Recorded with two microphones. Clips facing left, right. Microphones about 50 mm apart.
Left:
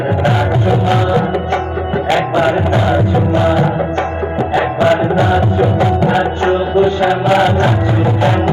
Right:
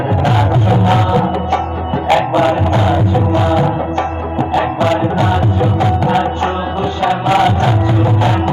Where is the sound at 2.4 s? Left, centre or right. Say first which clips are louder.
Even; centre.